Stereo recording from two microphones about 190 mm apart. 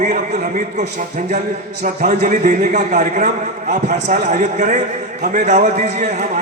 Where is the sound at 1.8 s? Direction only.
45° right (ahead or behind).